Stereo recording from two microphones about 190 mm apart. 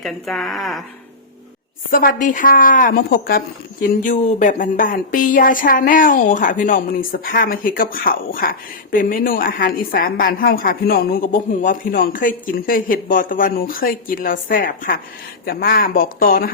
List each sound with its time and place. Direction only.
0.0 s speech: centre (ahead or behind)
1.9 s a woman's voice: 45° left (ahead or behind)